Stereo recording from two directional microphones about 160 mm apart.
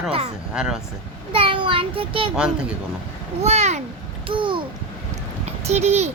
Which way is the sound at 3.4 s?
45° right (ahead or behind).